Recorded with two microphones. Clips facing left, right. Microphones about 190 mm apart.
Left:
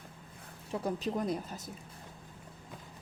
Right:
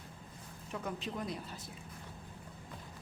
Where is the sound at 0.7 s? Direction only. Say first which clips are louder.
Left 6 dB; 35° left (ahead or behind).